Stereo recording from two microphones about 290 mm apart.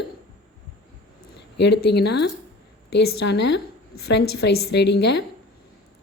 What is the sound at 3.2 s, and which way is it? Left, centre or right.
Speech, left.